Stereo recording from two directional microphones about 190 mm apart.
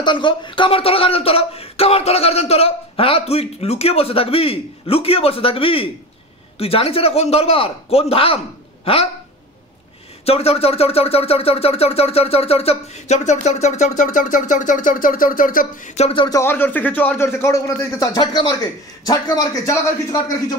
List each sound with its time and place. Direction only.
0.0 s speech: 25° left (ahead or behind)
10.2 s a man's voice: 30° left (ahead or behind)